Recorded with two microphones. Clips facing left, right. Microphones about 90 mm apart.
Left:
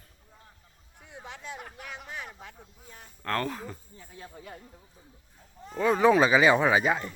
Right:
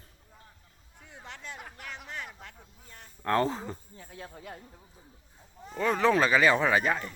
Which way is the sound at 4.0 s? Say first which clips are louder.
Right 1 dB; centre (ahead or behind).